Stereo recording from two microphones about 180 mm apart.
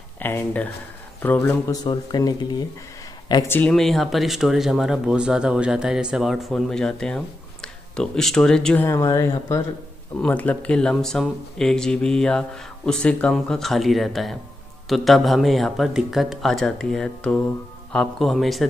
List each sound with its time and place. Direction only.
0.2 s speech: 10° left (ahead or behind)
1.7 s speech: 20° left (ahead or behind)
3.4 s speech: 10° left (ahead or behind)
8.8 s speech: 20° left (ahead or behind); by 18.7 s centre (ahead or behind)